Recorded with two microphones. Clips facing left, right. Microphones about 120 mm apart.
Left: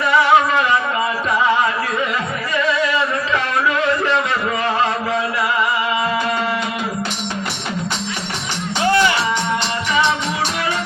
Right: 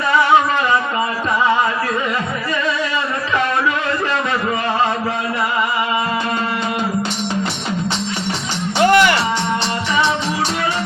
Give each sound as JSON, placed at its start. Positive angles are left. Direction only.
{"t": 8.8, "sound": "music", "side_deg": -60}